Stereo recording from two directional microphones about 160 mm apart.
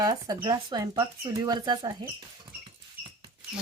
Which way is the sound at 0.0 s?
25° right (ahead or behind).